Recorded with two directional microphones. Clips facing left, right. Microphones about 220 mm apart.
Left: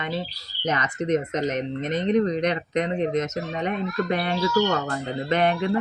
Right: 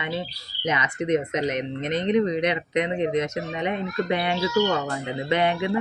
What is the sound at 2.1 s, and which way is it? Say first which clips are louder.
Speech: even; 10° right (ahead or behind).